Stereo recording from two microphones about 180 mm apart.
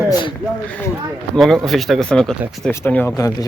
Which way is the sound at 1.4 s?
Centre (ahead or behind).